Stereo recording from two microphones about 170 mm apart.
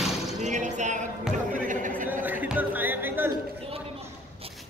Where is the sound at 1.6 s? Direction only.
50° right (ahead or behind).